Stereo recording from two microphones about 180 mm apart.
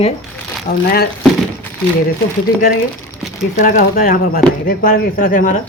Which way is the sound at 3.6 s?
50° left (ahead or behind).